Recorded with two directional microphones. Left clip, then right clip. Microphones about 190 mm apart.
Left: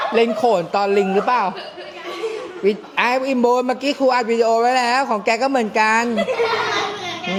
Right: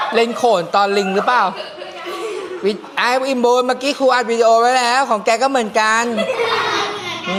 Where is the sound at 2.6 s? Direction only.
20° left (ahead or behind).